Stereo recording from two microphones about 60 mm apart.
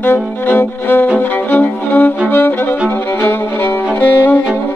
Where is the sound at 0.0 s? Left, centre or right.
Left.